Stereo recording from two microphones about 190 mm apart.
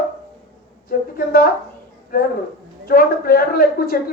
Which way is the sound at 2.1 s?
50° left (ahead or behind).